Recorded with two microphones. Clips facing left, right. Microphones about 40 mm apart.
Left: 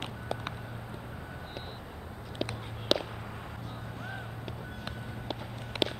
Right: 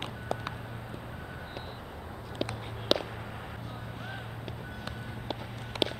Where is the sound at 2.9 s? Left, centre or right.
Centre.